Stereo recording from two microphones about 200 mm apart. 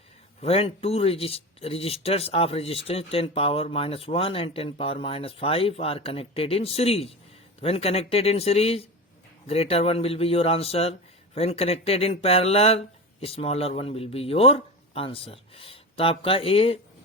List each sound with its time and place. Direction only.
0.4 s speech: 30° left (ahead or behind)